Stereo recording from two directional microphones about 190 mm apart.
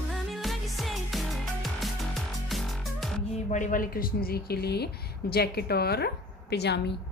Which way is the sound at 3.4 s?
40° left (ahead or behind).